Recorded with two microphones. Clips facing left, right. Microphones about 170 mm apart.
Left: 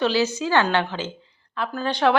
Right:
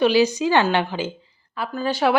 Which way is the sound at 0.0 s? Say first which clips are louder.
Right 4 dB; 15° right (ahead or behind).